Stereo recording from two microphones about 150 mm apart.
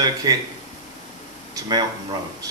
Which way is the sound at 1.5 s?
25° right (ahead or behind).